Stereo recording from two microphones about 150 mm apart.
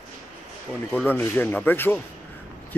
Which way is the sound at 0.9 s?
10° left (ahead or behind).